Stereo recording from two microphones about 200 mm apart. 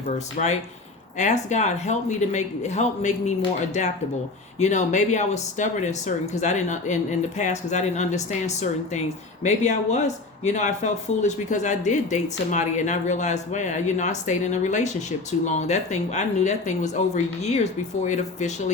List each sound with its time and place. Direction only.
0.4 s speech: 40° left (ahead or behind)
4.6 s speech: 35° left (ahead or behind)